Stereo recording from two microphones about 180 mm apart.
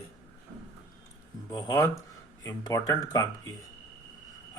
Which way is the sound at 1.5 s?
20° left (ahead or behind).